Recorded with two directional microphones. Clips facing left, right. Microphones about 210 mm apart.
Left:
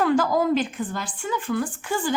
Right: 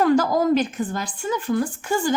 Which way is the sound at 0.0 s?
40° right (ahead or behind).